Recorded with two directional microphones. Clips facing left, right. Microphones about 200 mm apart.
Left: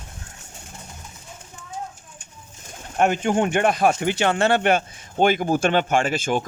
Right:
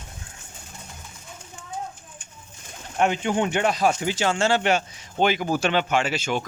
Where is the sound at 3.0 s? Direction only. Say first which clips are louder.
Left 3 dB; 50° left (ahead or behind).